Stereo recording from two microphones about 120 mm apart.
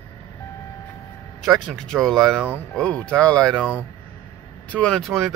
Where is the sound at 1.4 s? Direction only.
Centre (ahead or behind).